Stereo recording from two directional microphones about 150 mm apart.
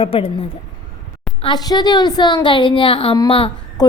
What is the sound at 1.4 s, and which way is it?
A woman's voice, 25° left (ahead or behind).